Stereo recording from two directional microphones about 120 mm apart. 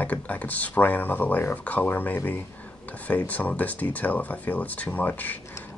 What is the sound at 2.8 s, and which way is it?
Speech, 10° left (ahead or behind).